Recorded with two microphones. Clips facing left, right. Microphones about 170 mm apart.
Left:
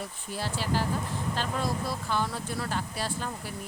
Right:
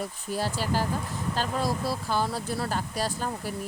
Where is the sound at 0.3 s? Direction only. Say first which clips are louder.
Right 2 dB; 40° right (ahead or behind).